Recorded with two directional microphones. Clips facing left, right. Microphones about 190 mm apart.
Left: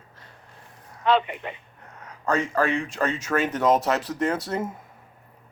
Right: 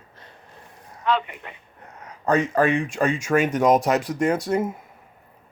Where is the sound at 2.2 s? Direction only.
20° right (ahead or behind).